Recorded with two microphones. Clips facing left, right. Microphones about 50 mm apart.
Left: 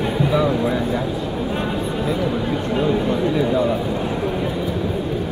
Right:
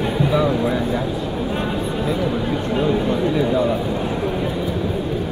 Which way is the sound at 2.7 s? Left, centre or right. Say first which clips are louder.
Even; centre.